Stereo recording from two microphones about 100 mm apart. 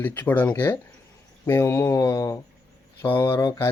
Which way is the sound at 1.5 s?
25° left (ahead or behind).